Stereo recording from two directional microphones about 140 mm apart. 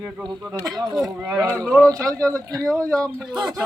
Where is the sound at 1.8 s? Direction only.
20° right (ahead or behind).